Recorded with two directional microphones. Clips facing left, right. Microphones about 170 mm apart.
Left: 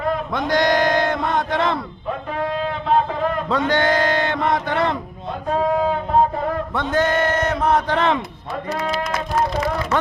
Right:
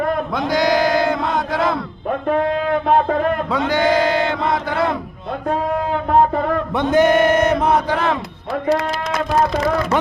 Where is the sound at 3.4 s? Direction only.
10° right (ahead or behind).